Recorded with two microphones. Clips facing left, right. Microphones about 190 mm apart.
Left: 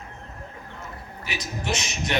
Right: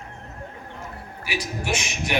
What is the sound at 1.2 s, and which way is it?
Speech, 10° right (ahead or behind).